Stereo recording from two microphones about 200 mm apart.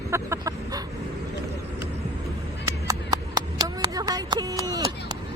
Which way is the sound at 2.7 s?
20° right (ahead or behind).